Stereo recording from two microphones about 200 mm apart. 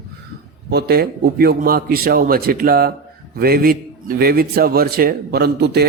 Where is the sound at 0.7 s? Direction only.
50° right (ahead or behind).